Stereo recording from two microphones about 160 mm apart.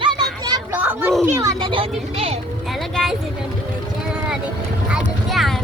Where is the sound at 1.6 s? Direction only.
30° right (ahead or behind).